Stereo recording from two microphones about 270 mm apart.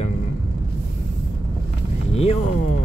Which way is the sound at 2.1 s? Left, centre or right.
Left.